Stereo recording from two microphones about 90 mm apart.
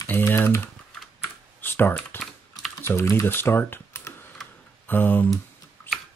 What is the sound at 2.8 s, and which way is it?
Speech, 30° left (ahead or behind).